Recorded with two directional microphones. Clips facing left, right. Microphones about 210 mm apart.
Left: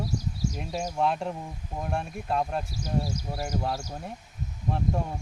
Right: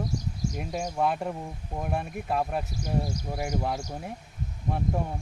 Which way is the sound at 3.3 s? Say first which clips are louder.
Right 1 dB; 15° right (ahead or behind).